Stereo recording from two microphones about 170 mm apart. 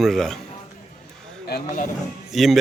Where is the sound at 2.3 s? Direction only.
Centre (ahead or behind).